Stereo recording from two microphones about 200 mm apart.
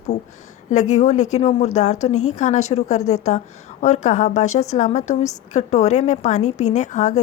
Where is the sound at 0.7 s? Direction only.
35° left (ahead or behind).